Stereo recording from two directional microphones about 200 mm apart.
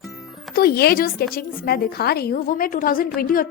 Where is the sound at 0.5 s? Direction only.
50° left (ahead or behind).